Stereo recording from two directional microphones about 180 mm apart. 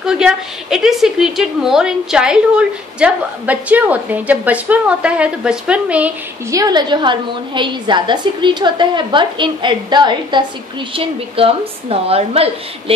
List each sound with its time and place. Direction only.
0.0 s a woman's voice: 5° right (ahead or behind)
6.5 s a woman's voice: 20° right (ahead or behind)